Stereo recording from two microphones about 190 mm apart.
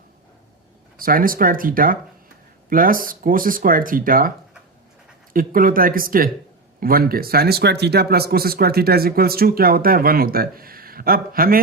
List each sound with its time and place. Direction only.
0.9 s speech: 50° right (ahead or behind)
5.3 s speech: 45° right (ahead or behind)